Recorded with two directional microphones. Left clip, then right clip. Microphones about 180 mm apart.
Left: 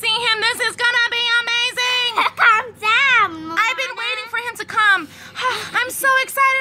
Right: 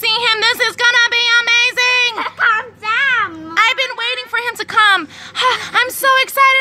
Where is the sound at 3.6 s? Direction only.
15° right (ahead or behind).